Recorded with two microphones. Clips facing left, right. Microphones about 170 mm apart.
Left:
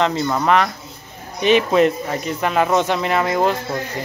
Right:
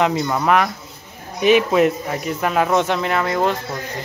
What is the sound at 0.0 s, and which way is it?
Speech, 5° right (ahead or behind).